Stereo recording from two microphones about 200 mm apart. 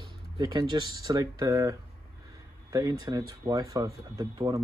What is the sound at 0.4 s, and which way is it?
Speech, 20° right (ahead or behind).